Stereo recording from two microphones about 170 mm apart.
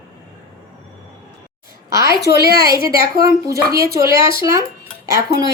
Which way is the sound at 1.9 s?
20° right (ahead or behind).